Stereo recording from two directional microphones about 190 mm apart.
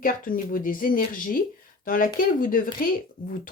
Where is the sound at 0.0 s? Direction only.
50° left (ahead or behind).